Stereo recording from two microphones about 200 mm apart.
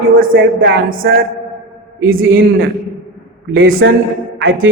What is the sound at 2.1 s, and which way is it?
A man's voice, 80° right.